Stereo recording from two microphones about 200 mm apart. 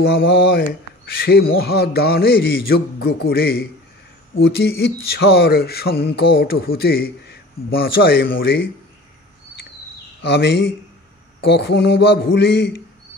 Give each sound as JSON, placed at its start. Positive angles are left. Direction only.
{"t": 0.0, "sound": "a man's voice", "side_deg": 65}
{"t": 10.2, "sound": "a man's voice", "side_deg": 60}